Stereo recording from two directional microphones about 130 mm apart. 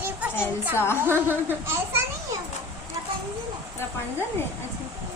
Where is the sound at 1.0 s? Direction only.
15° right (ahead or behind).